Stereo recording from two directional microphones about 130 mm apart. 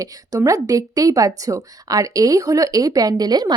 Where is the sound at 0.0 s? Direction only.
25° right (ahead or behind).